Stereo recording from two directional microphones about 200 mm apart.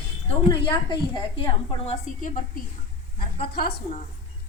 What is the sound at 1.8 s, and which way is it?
Speech, 40° left (ahead or behind).